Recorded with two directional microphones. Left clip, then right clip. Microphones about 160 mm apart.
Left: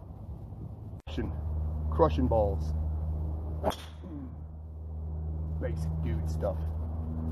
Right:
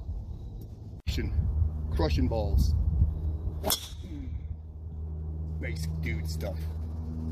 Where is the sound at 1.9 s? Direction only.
20° right (ahead or behind).